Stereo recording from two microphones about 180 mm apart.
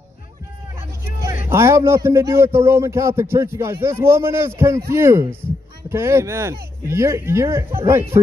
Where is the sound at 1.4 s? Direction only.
15° right (ahead or behind).